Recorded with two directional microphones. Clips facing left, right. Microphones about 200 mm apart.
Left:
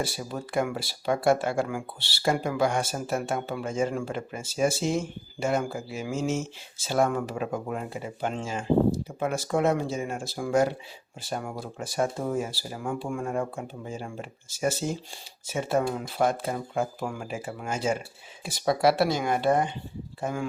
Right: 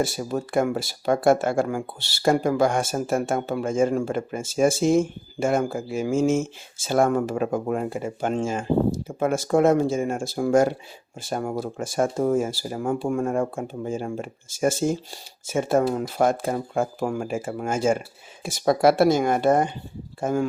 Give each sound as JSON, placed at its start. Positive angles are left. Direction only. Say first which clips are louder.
{"t": 0.0, "sound": "speech", "louder": "right 7 dB", "side_deg": -45}